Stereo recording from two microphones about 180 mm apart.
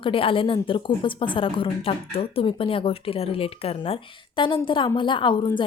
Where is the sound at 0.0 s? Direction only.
30° left (ahead or behind).